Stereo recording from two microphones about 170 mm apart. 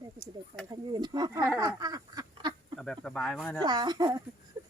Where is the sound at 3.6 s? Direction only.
25° right (ahead or behind).